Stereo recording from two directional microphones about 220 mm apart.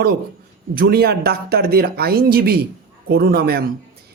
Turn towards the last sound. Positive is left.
turn(degrees=-45)  # may be behind; listen again after turning